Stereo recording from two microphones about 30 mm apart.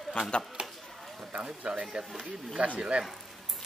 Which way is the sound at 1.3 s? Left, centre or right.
Right.